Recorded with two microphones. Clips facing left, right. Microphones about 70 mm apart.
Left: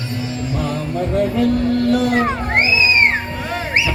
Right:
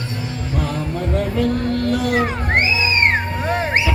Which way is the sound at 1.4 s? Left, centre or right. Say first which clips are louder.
Left 2 dB; right.